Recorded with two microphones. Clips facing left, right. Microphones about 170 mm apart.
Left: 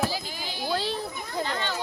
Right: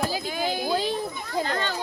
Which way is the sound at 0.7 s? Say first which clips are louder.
Even; 15° right (ahead or behind).